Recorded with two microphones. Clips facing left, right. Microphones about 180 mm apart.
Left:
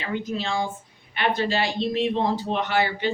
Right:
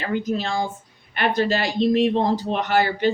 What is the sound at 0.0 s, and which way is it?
Speech, 45° right (ahead or behind).